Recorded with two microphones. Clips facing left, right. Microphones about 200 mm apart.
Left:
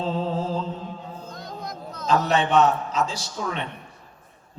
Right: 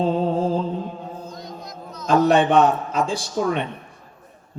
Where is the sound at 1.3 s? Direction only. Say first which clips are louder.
Even; 55° left (ahead or behind).